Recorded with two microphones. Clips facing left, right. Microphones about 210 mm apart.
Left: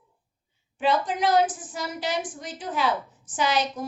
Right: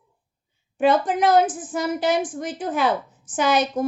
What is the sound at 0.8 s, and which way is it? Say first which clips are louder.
A woman's voice: right 5 dB; 50° right (ahead or behind).